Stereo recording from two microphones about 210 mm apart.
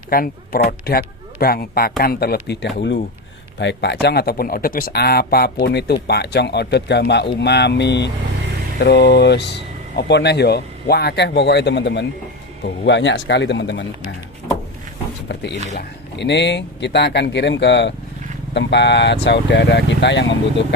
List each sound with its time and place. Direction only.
0.1 s speech: 45° left (ahead or behind)
15.3 s speech: 55° left (ahead or behind)